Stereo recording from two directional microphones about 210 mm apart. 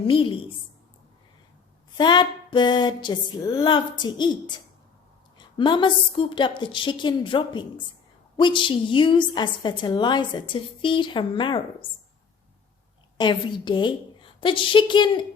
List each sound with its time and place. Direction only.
0.1 s a woman's voice: 25° left (ahead or behind)
2.0 s a woman's voice: 20° left (ahead or behind)
13.1 s a woman's voice: 20° left (ahead or behind)